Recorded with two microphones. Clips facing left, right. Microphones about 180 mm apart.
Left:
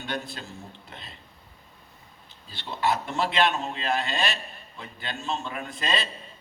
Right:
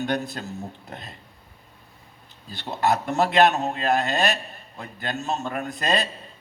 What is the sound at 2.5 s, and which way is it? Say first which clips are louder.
A man's voice: right 4 dB; 45° right (ahead or behind).